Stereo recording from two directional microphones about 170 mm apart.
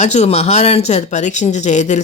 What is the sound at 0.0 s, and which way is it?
A woman's voice, 40° left (ahead or behind).